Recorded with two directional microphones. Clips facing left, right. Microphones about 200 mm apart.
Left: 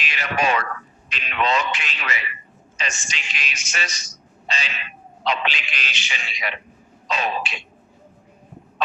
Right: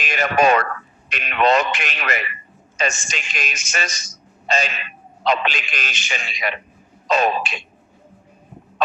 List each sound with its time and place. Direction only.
0.0 s a man's voice: 45° right (ahead or behind)